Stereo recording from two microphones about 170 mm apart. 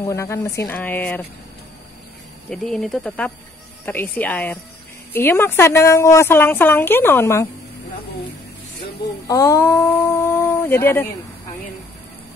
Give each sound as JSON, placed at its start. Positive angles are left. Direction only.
{"t": 0.0, "sound": "a woman's voice", "side_deg": 15}
{"t": 2.5, "sound": "a woman's voice", "side_deg": 5}
{"t": 9.3, "sound": "a woman's voice", "side_deg": 20}